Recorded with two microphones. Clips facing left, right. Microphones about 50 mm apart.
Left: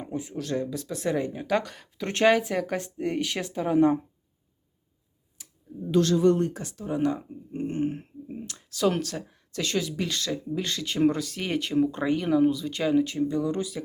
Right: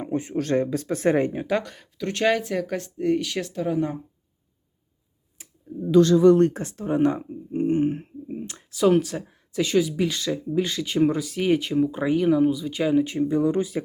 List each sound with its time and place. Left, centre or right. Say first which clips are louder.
0.1 s speech: right 7 dB; right
1.5 s speech: right 1 dB; centre
2.0 s speech: right 1 dB; left
2.2 s speech: left 1 dB; centre
3.2 s speech: right 2 dB; centre
3.8 s speech: left 5 dB; left
5.4 s clicking: right 3 dB; right
6.5 s speech: right 5 dB; right
7.3 s a sound: right 8 dB; right
8.7 s speech: right 6 dB; centre
13.1 s speech: right 4 dB; right